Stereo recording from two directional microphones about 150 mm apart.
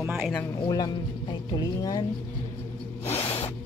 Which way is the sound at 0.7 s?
25° left (ahead or behind).